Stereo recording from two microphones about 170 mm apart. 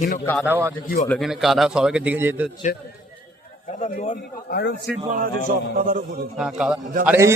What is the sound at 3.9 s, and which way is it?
Speech, 55° left (ahead or behind).